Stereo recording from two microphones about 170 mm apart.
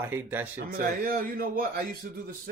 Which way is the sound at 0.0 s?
10° right (ahead or behind).